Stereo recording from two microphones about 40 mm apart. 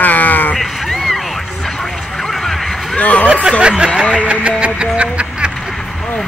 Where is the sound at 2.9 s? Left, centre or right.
Left.